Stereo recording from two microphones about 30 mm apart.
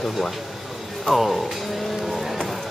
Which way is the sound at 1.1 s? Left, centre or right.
Centre.